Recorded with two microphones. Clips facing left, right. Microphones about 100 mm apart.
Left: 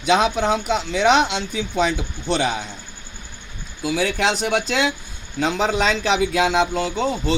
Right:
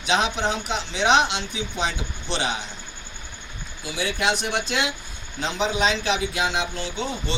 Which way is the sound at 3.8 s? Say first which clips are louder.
Left 6 dB; 85° left.